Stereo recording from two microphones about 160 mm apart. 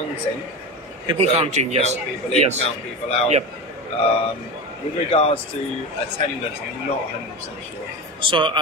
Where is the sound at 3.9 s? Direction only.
35° left (ahead or behind).